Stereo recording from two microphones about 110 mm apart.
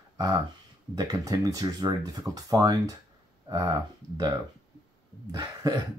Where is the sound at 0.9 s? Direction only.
35° right (ahead or behind).